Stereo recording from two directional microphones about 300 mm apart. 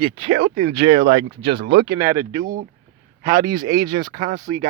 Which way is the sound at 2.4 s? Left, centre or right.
Right.